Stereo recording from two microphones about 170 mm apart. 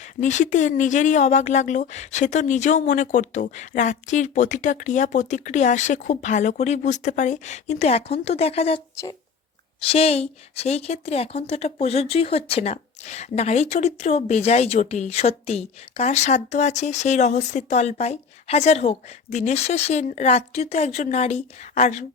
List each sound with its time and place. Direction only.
0.0 s speech: 45° left (ahead or behind)
9.9 s a woman's voice: 35° left (ahead or behind)